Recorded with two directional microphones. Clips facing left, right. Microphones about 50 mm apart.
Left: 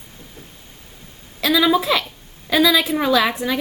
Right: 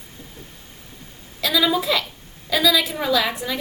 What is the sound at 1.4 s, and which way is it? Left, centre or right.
A woman's voice, left.